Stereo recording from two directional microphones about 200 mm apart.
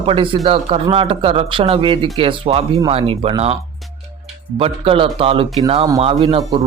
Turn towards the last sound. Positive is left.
turn(degrees=-30)  # may be behind; listen again after turning